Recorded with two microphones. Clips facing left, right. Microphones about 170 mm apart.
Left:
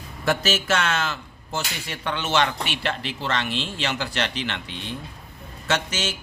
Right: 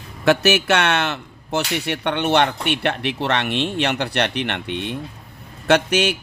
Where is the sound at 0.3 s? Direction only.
70° right (ahead or behind).